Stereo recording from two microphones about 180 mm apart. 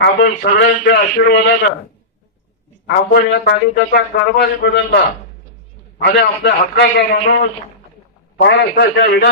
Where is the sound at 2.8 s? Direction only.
70° left (ahead or behind).